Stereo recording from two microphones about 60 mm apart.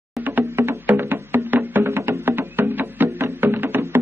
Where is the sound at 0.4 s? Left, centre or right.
Right.